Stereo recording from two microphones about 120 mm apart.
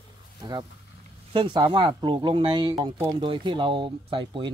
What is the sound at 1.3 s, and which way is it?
Speech, 45° right (ahead or behind).